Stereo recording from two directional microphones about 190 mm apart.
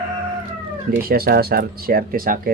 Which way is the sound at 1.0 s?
50° right (ahead or behind).